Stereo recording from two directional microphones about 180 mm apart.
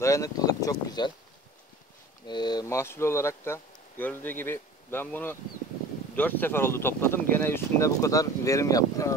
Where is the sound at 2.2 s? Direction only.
25° left (ahead or behind).